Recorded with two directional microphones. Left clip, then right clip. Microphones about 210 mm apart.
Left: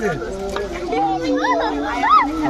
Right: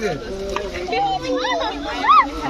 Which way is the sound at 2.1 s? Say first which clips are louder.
Right 1 dB; 50° left (ahead or behind).